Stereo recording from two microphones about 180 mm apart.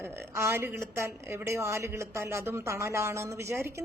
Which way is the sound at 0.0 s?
15° right (ahead or behind).